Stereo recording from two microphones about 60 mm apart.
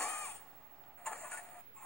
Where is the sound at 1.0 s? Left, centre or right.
Centre.